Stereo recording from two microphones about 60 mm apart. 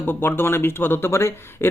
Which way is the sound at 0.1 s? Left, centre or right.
Left.